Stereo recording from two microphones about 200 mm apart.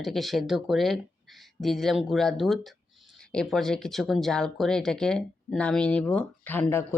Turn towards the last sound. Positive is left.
turn(degrees=10)  # may be behind; listen again after turning